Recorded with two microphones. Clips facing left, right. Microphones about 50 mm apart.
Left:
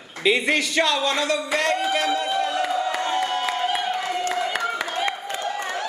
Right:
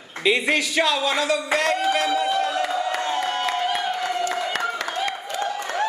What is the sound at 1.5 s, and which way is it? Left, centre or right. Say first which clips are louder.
Music: right 2 dB; centre.